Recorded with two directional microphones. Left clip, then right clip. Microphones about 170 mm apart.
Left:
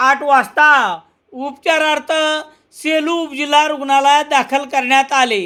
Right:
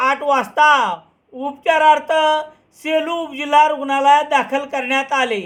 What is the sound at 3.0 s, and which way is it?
Speech, 55° left (ahead or behind).